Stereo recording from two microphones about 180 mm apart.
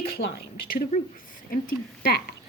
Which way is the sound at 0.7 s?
55° left (ahead or behind).